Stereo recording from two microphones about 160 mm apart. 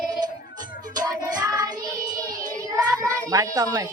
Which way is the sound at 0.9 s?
25° right (ahead or behind).